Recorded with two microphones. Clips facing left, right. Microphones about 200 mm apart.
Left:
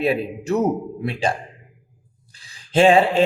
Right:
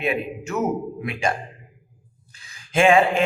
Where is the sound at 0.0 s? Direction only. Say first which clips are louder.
Left 4 dB; 35° left (ahead or behind).